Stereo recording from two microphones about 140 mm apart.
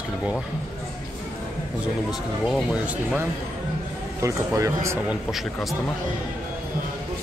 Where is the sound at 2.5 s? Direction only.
Centre (ahead or behind).